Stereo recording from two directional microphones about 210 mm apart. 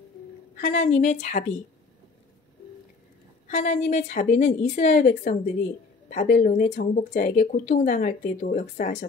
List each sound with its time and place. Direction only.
0.6 s a woman's voice: 35° left (ahead or behind)
3.4 s a woman's voice: 35° left (ahead or behind)